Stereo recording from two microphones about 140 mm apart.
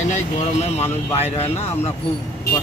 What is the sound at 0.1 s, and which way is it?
Speech, 55° left (ahead or behind).